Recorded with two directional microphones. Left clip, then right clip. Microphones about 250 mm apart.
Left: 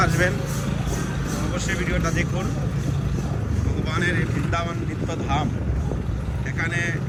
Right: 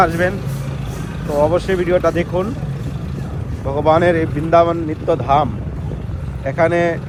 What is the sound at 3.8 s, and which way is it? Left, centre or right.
Speech, centre.